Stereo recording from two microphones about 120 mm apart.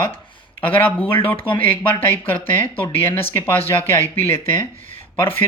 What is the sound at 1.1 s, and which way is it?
Speech, 45° left (ahead or behind).